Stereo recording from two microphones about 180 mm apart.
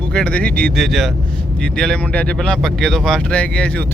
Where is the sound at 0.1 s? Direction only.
5° left (ahead or behind).